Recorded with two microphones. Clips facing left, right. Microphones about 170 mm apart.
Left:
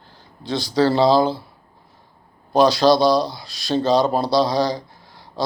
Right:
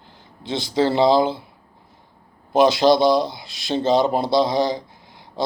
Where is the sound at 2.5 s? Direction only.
20° right (ahead or behind).